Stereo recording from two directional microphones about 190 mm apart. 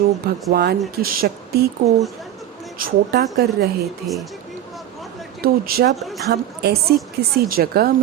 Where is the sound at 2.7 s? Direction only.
55° right (ahead or behind).